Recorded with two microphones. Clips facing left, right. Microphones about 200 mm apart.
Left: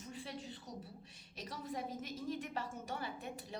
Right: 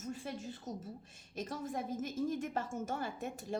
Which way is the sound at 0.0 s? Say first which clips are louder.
Right 5 dB; 45° right (ahead or behind).